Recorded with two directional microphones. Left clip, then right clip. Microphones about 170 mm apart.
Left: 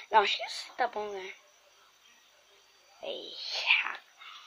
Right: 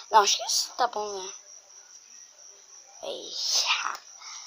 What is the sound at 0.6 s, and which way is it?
Speech, 25° right (ahead or behind).